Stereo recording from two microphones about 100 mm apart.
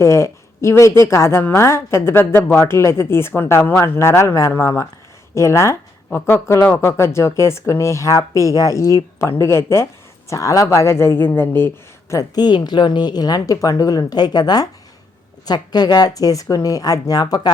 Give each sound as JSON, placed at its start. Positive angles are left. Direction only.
{"t": 0.0, "sound": "speech", "side_deg": 30}
{"t": 12.1, "sound": "a woman's voice", "side_deg": 40}